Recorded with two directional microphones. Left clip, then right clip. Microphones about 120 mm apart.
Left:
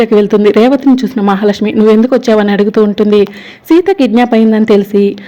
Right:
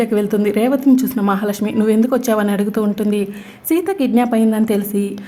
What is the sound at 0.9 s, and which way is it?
A woman's voice, 25° left (ahead or behind).